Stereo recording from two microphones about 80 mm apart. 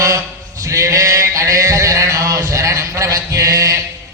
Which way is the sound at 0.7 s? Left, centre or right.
Right.